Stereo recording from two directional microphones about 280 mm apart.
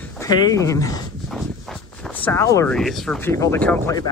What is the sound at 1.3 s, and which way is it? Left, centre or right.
Speech, centre.